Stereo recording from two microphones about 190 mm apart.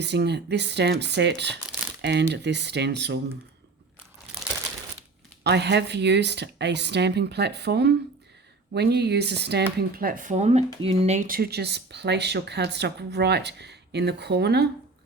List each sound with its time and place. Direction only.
0.0 s speech: 65° right (ahead or behind)
5.4 s speech: 60° right (ahead or behind)
9.9 s speech: 50° right (ahead or behind); by 11.3 s 35° right (ahead or behind)
11.3 s speech: 55° right (ahead or behind)